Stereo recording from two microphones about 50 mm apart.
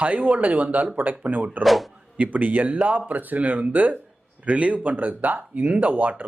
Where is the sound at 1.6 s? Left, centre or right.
Centre.